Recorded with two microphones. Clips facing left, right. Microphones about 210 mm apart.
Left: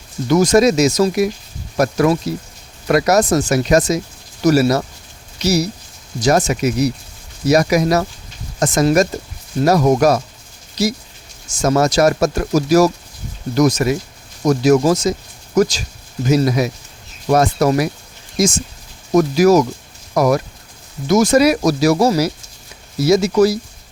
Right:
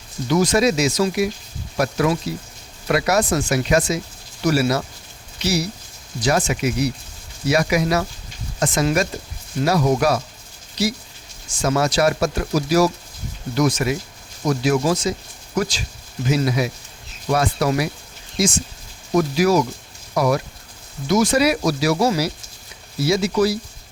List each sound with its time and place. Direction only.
0.3 s speech: 45° left (ahead or behind)